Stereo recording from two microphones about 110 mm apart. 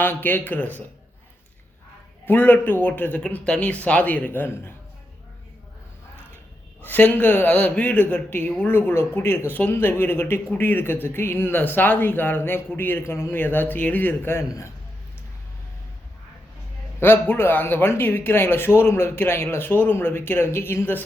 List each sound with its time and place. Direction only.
0.0 s speech: 15° left (ahead or behind)
2.2 s speech: 15° left (ahead or behind)
6.8 s speech: 15° left (ahead or behind)
17.0 s speech: 20° left (ahead or behind)